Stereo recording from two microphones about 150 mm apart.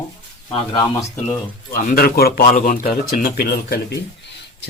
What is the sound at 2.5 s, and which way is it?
Speech, 65° left (ahead or behind).